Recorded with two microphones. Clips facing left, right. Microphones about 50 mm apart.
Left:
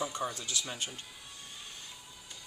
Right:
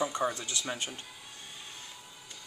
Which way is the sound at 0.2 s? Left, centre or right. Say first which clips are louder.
Right 5 dB; right.